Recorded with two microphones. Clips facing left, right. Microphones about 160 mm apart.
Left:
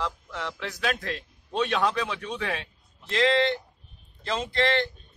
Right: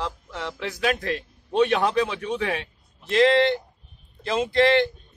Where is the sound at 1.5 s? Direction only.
20° right (ahead or behind).